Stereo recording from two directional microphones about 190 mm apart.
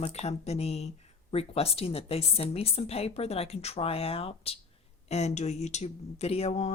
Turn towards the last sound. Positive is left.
turn(degrees=35)  # may be behind; listen again after turning